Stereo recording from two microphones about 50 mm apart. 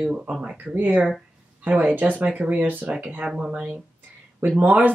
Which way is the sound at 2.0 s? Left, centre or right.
Right.